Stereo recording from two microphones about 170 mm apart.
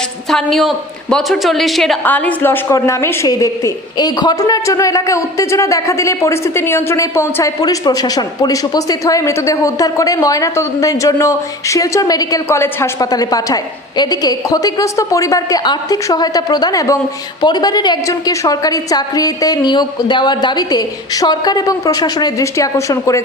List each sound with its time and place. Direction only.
0.3 s a woman's voice: centre (ahead or behind); by 23.2 s 20° left (ahead or behind)